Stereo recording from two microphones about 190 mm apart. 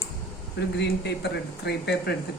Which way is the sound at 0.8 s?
60° left (ahead or behind).